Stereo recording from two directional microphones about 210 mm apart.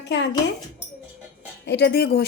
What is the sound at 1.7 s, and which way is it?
Speech, 55° left (ahead or behind).